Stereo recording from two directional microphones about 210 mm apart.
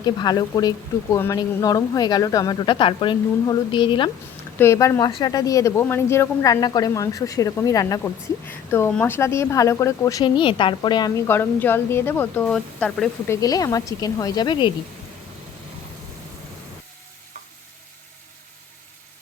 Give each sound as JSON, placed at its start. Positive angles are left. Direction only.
{"t": 0.0, "sound": "a woman's voice", "side_deg": 20}
{"t": 4.5, "sound": "a woman's voice", "side_deg": 10}
{"t": 11.3, "sound": "a woman's voice", "side_deg": 10}